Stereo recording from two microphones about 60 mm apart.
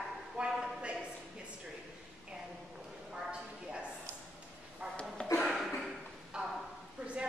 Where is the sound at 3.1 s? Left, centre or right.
Centre.